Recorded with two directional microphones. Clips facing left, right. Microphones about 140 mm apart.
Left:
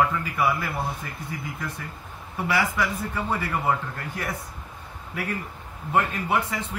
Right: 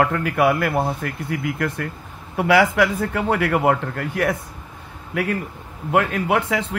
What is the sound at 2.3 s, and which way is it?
Speech, 80° right.